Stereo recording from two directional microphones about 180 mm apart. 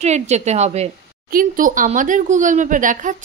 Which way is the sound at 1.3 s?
50° right (ahead or behind).